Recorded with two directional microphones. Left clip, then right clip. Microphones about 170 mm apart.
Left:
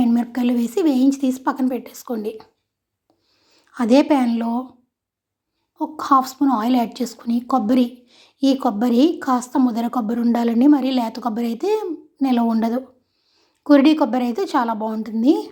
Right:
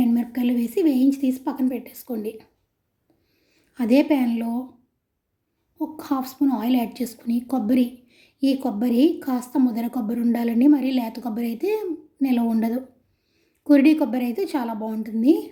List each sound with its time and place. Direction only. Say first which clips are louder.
0.0 s speech: left 3 dB; 5° right (ahead or behind)
5.7 s a woman's voice: left 10 dB; 10° right (ahead or behind)